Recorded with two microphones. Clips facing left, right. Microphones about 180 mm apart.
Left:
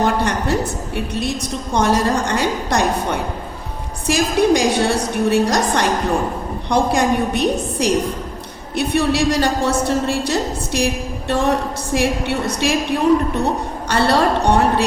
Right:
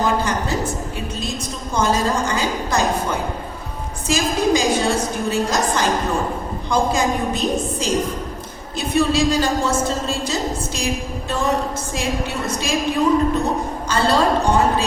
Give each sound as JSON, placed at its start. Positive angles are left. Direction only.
{"t": 0.0, "sound": "a sound", "side_deg": 65}
{"t": 0.9, "sound": "a woman's voice", "side_deg": 65}
{"t": 13.8, "sound": "a woman's voice", "side_deg": 65}